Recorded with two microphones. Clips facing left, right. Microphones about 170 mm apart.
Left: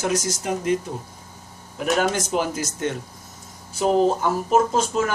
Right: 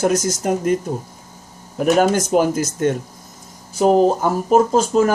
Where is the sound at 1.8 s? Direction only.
45° right (ahead or behind).